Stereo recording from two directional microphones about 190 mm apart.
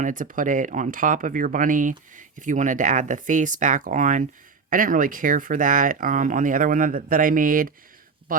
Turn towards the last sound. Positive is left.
turn(degrees=-45)  # may be behind; listen again after turning